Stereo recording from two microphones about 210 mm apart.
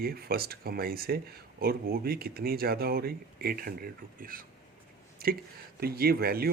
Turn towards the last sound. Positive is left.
turn(degrees=-45)  # may be behind; listen again after turning